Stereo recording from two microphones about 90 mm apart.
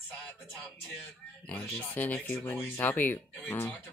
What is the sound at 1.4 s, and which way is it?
Speech, 20° left (ahead or behind).